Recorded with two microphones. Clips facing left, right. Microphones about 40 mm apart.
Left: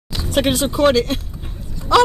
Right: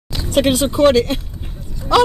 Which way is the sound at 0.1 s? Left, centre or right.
Centre.